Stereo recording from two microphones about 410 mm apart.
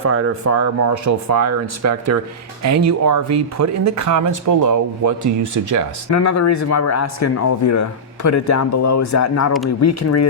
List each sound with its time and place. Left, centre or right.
0.0 s speech: right
6.1 s speech: left